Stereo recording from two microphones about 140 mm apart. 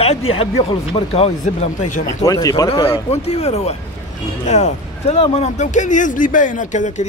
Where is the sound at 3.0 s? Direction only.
50° left (ahead or behind).